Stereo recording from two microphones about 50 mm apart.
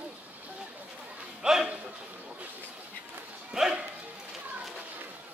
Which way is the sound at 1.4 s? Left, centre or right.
Centre.